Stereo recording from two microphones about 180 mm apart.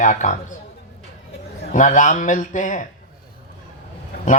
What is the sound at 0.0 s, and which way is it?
Speech, 45° left (ahead or behind).